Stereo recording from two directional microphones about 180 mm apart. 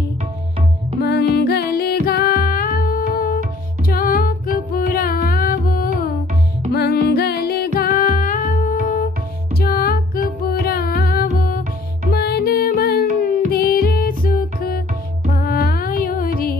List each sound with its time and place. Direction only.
1.0 s music: 65° left (ahead or behind); by 8.9 s 45° left (ahead or behind)
9.6 s music: 55° left (ahead or behind)